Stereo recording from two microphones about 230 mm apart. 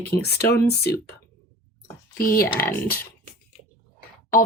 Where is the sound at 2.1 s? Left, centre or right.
Left.